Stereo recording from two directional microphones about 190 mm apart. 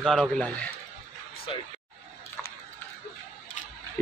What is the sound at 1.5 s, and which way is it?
Speech, 25° left (ahead or behind).